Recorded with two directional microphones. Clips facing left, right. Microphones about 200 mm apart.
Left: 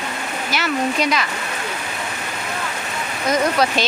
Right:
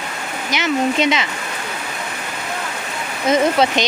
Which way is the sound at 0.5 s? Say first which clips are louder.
Right 3 dB; 20° right (ahead or behind).